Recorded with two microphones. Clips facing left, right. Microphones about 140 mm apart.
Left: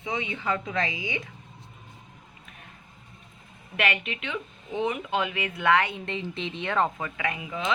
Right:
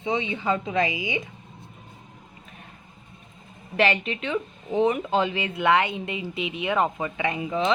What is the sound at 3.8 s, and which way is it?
Speech, 30° right (ahead or behind).